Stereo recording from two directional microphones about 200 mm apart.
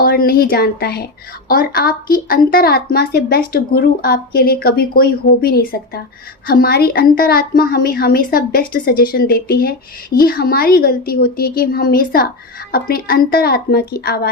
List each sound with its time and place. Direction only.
0.0 s speech: 45° left (ahead or behind)